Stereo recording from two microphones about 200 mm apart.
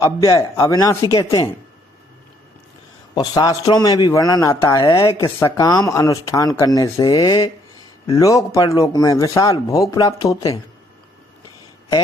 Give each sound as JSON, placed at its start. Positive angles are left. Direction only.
{"t": 0.0, "sound": "speech", "side_deg": 15}
{"t": 3.2, "sound": "speech", "side_deg": 20}